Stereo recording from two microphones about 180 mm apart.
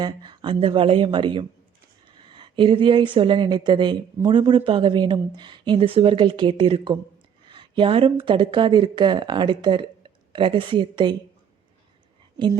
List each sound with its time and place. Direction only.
0.0 s speech: 25° right (ahead or behind)